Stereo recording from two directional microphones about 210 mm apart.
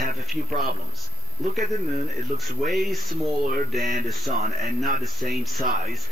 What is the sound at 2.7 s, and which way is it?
Speech, centre (ahead or behind).